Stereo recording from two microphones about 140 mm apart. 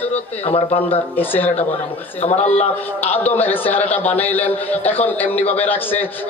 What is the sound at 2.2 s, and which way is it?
Speech, 50° left (ahead or behind).